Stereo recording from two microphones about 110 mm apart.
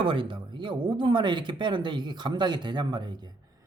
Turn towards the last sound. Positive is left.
turn(degrees=-40)  # may be behind; listen again after turning